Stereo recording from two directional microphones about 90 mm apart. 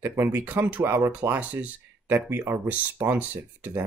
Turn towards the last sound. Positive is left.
turn(degrees=-20)  # may be behind; listen again after turning